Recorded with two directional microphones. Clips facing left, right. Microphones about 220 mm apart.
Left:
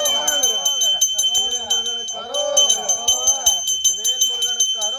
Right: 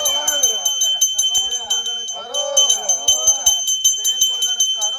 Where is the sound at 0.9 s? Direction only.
60° right (ahead or behind).